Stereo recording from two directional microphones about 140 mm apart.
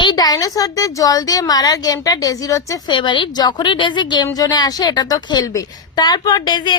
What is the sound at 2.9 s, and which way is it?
A woman's voice, 35° left (ahead or behind).